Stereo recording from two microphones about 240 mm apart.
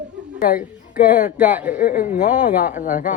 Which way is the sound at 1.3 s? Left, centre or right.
Centre.